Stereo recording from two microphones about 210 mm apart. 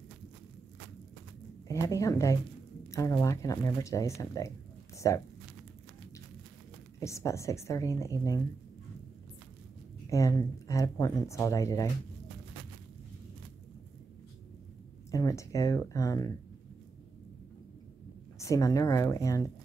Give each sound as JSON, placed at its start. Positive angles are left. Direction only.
{"t": 1.7, "sound": "speech", "side_deg": 15}
{"t": 7.0, "sound": "speech", "side_deg": 15}
{"t": 10.0, "sound": "speech", "side_deg": 15}
{"t": 15.0, "sound": "speech", "side_deg": 15}
{"t": 18.4, "sound": "speech", "side_deg": 15}